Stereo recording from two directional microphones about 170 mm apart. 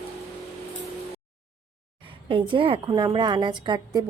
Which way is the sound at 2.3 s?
30° right (ahead or behind).